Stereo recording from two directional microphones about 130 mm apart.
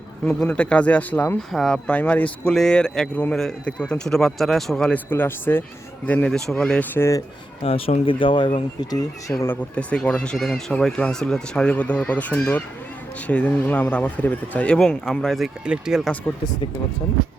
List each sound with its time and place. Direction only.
0.3 s a man's voice: 10° left (ahead or behind)
7.6 s speech: 50° left (ahead or behind)
8.8 s speech: 30° left (ahead or behind)
9.4 s speech: 15° left (ahead or behind); by 16.1 s 5° right (ahead or behind)